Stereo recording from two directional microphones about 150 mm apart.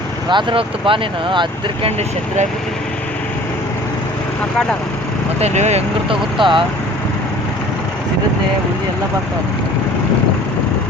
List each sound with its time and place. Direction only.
0.3 s speech: 35° right (ahead or behind)
5.4 s speech: 50° right (ahead or behind)
6.4 s speech: 35° right (ahead or behind)